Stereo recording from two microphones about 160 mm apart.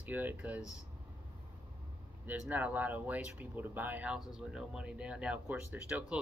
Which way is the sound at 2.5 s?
10° right (ahead or behind).